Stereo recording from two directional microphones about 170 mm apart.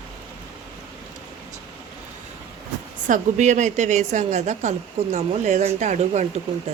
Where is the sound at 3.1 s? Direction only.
45° right (ahead or behind).